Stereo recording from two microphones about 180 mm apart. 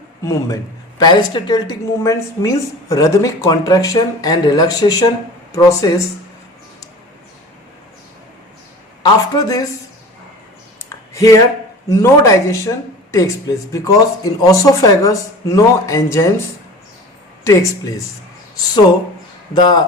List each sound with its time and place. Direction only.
0.3 s a woman's voice: 20° left (ahead or behind)
9.0 s a woman's voice: 20° left (ahead or behind)
10.8 s a sound: 20° left (ahead or behind)
11.9 s speech: 20° left (ahead or behind)
17.4 s speech: 15° left (ahead or behind)
19.5 s a woman's voice: 25° left (ahead or behind)